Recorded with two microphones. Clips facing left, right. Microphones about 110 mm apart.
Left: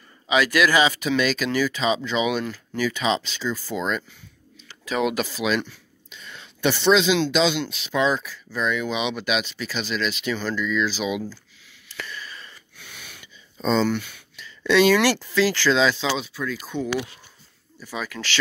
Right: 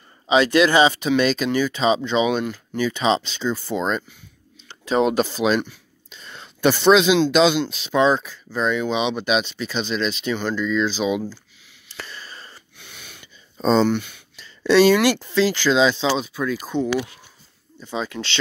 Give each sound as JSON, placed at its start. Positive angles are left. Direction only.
{"t": 0.3, "sound": "speech", "side_deg": -30}
{"t": 6.0, "sound": "a sound", "side_deg": -35}
{"t": 7.2, "sound": "speech", "side_deg": -45}
{"t": 7.6, "sound": "speech", "side_deg": -35}
{"t": 11.9, "sound": "a sound", "side_deg": -30}
{"t": 12.7, "sound": "wheeze", "side_deg": -25}
{"t": 13.2, "sound": "a sound", "side_deg": -35}
{"t": 15.0, "sound": "speech", "side_deg": -20}
{"t": 16.2, "sound": "speech", "side_deg": -55}
{"t": 16.5, "sound": "speech", "side_deg": -30}